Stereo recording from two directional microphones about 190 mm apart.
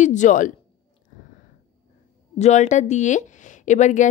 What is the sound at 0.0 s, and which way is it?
Speech, 40° left (ahead or behind).